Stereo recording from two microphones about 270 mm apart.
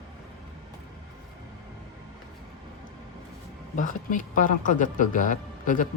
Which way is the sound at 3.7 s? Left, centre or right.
Left.